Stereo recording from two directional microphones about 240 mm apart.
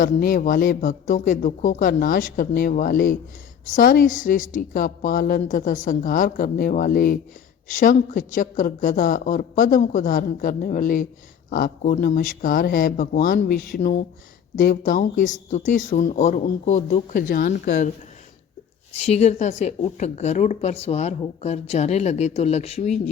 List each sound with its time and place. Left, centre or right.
0.0 s a woman's voice: left
18.9 s a woman's voice: left